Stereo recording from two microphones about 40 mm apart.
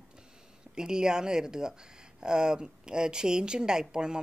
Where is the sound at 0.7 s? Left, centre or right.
Centre.